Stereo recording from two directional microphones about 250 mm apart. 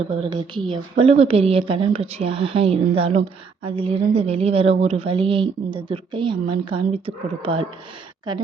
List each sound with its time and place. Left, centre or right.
0.2 s speech: centre